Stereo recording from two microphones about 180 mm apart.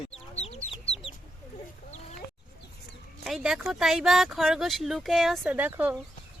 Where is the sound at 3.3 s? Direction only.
Centre (ahead or behind).